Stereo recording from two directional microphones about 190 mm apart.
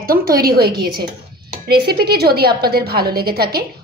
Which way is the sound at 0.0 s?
50° right (ahead or behind).